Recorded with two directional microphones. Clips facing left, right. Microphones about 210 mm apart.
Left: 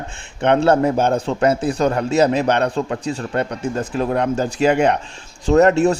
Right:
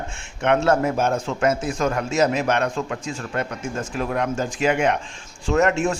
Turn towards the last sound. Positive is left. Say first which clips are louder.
# left 6 dB
turn(degrees=35)  # may be behind; listen again after turning